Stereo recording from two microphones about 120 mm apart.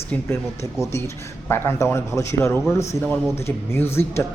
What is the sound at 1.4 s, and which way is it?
A man's voice, 20° left (ahead or behind).